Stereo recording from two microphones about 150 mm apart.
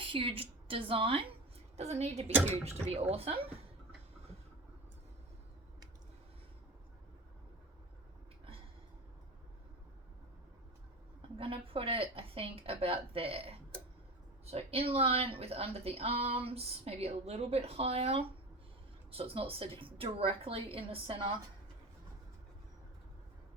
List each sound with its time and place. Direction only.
0.0 s speech: 35° right (ahead or behind)
11.2 s speech: 35° right (ahead or behind)